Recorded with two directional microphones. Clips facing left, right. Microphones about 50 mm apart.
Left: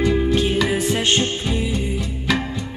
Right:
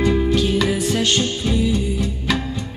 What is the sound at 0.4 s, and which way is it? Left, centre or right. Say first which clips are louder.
Music: even; left.